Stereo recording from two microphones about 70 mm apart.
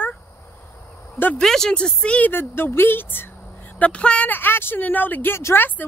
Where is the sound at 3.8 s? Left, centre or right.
Centre.